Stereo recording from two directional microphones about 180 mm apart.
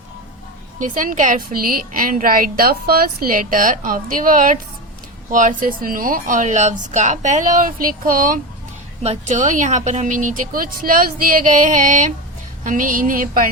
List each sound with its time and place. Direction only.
0.8 s a woman's voice: 45° right (ahead or behind)